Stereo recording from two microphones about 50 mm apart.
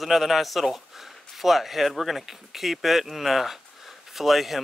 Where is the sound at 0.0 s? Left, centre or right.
Centre.